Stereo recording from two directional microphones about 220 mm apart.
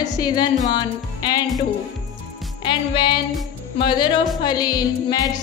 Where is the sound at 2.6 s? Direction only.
20° left (ahead or behind).